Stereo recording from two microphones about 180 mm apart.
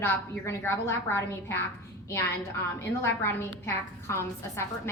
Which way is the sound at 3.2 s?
15° left (ahead or behind).